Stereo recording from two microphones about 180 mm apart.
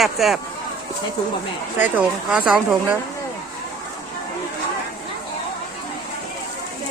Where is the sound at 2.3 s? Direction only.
5° right (ahead or behind).